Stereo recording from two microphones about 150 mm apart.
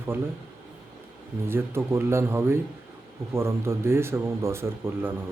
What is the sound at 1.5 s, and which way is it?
Speech, 15° right (ahead or behind).